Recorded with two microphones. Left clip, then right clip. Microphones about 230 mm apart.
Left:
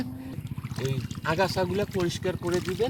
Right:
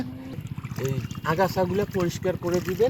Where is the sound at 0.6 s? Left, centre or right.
Centre.